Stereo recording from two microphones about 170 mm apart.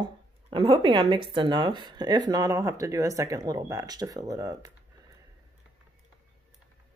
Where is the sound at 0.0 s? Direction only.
30° right (ahead or behind).